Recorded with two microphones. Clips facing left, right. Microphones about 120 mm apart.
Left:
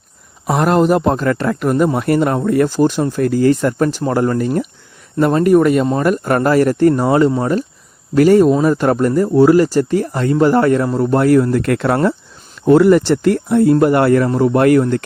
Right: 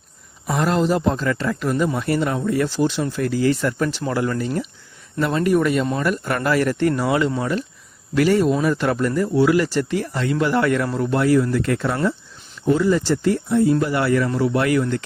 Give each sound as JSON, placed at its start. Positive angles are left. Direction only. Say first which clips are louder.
{"t": 0.4, "sound": "a man's voice", "louder": "left 6 dB", "side_deg": 55}
{"t": 11.6, "sound": "a man's voice", "louder": "left 6 dB", "side_deg": 65}